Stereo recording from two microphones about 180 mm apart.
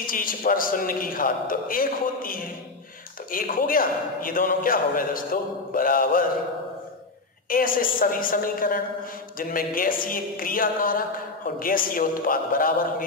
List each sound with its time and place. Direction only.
0.0 s a man's voice: 50° left (ahead or behind)
7.4 s a man's voice: 50° left (ahead or behind)